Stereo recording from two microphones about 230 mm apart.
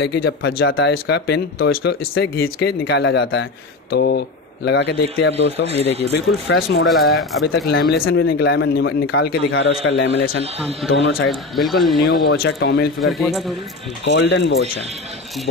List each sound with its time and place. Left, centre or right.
0.0 s speech: left
2.8 s speech: left
6.9 s speech: centre
7.5 s speech: left
8.0 s speech: left
10.9 s speech: left
11.2 s speech: centre
12.0 s speech: left
12.4 s speech: left
13.0 s speech: centre
14.0 s speech: left